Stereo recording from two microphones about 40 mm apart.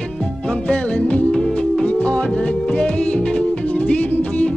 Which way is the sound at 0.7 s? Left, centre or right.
Left.